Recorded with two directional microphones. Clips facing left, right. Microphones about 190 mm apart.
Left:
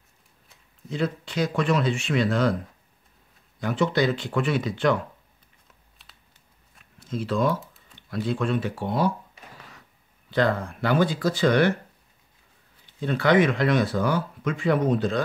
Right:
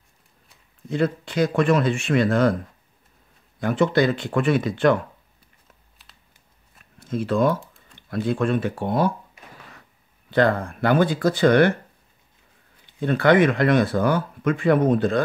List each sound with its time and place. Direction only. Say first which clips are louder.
0.8 s speech: right 5 dB; 55° right (ahead or behind)
3.5 s speech: right 4 dB; 55° right (ahead or behind)
6.0 s a sound: left 2 dB; centre (ahead or behind)
7.0 s speech: right 4 dB; 55° right (ahead or behind)
10.3 s speech: right 4 dB; 55° right (ahead or behind)
13.0 s speech: right 3 dB; 55° right (ahead or behind)